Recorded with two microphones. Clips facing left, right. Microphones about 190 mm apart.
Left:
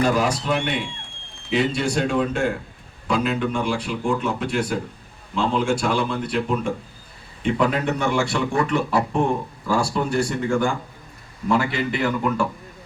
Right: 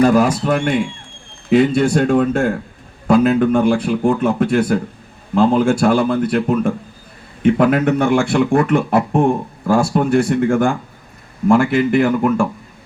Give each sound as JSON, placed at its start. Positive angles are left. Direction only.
{"t": 0.0, "sound": "speech", "side_deg": -50}